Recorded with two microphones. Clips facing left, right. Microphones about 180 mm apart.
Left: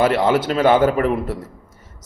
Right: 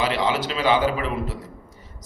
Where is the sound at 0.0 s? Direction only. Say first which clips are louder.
Left 7 dB; 50° left (ahead or behind).